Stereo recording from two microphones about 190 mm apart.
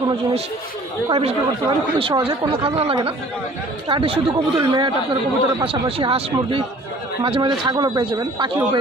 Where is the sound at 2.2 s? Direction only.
30° right (ahead or behind).